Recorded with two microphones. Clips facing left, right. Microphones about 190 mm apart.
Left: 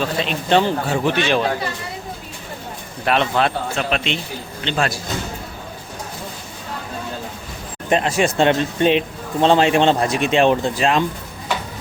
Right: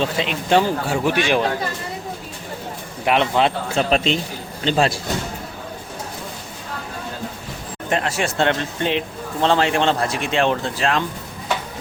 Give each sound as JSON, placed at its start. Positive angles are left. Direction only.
{"t": 0.0, "sound": "speech", "side_deg": -15}
{"t": 3.0, "sound": "speech", "side_deg": -15}
{"t": 3.8, "sound": "speech", "side_deg": -35}
{"t": 7.9, "sound": "speech", "side_deg": 20}